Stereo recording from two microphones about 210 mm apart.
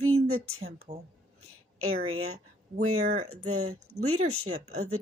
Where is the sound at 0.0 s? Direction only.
90° right.